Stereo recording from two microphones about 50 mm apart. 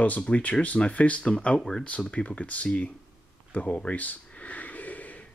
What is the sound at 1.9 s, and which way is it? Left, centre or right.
Speech, left.